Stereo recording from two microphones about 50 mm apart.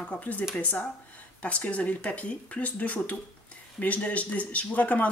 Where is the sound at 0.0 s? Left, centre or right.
Left.